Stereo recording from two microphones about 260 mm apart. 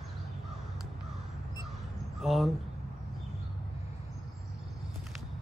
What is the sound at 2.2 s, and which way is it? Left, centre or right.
Speech, centre.